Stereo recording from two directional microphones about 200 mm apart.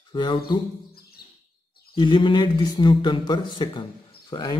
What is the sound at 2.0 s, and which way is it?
Speech, 25° left (ahead or behind).